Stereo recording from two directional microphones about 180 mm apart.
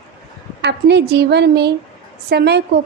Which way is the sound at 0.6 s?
70° right (ahead or behind).